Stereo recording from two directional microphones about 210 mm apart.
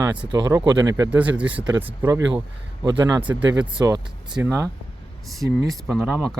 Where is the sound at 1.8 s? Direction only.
15° right (ahead or behind).